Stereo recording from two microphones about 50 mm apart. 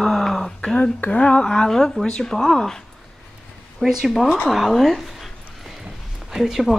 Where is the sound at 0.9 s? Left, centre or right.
Left; by 2.8 s centre.